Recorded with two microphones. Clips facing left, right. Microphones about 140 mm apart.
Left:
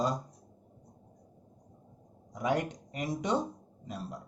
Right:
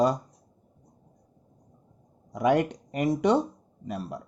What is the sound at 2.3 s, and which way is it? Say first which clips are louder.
Speech: right 8 dB; 70° right (ahead or behind).